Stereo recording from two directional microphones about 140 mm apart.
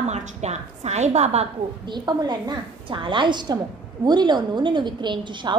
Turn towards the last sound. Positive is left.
turn(degrees=-35)  # may be behind; listen again after turning